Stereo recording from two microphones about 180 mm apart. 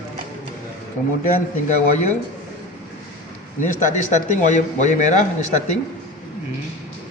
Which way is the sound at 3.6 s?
45° left (ahead or behind).